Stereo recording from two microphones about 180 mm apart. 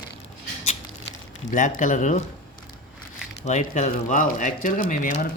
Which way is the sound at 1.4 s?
45° left (ahead or behind).